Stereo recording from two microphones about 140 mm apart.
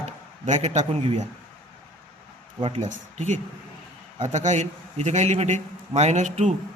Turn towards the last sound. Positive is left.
turn(degrees=-55)  # may be behind; listen again after turning